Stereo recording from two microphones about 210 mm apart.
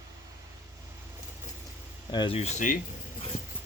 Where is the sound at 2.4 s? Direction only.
35° left (ahead or behind).